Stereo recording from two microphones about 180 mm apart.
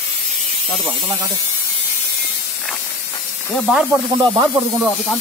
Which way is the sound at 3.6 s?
5° right (ahead or behind).